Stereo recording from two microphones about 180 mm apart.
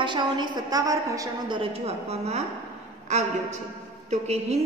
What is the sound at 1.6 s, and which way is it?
A woman's voice, 35° right (ahead or behind).